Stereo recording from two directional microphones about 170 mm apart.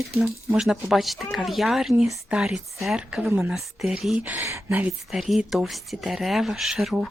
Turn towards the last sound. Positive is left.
turn(degrees=0)  # may be behind; listen again after turning